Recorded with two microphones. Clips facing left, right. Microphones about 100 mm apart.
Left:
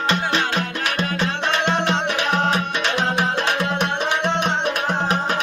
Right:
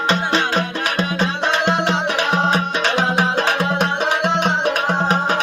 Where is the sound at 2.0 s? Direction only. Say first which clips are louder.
Right 2 dB; 35° right (ahead or behind).